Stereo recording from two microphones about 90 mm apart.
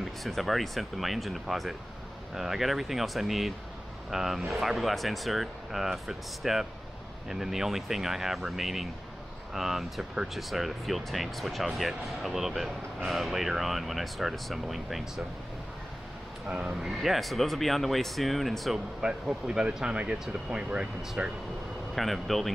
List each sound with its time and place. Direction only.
0.2 s speech: centre (ahead or behind)
16.4 s speech: 10° right (ahead or behind)
21.9 s speech: centre (ahead or behind)